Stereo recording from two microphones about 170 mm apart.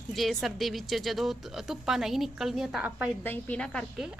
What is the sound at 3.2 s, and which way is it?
Speech, 10° left (ahead or behind).